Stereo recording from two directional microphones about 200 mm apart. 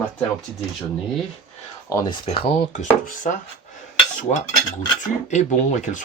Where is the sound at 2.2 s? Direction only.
30° left (ahead or behind).